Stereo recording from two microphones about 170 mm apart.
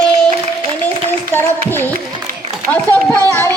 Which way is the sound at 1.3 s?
10° left (ahead or behind).